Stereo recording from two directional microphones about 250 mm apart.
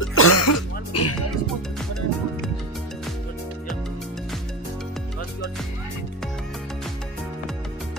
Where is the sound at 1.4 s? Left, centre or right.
Centre.